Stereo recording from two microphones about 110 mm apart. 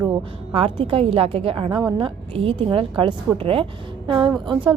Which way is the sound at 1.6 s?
40° right (ahead or behind).